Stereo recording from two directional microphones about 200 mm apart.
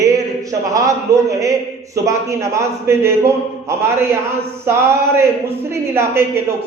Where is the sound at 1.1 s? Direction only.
15° right (ahead or behind).